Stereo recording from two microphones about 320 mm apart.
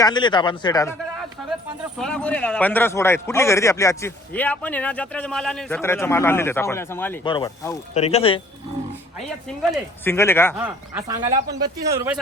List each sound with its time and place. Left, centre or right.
0.0 s speech: centre
9.7 s speech: centre
10.6 s speech: centre